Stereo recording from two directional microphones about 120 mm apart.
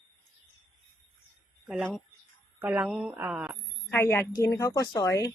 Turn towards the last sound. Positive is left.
turn(degrees=25)  # may be behind; listen again after turning